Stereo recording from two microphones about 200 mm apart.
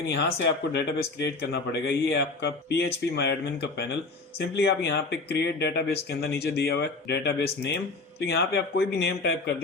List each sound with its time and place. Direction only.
0.0 s a man's voice: 55° left (ahead or behind)